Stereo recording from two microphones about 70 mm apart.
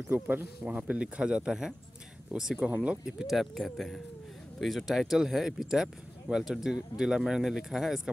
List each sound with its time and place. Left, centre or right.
0.1 s speech: right
0.7 s speech: centre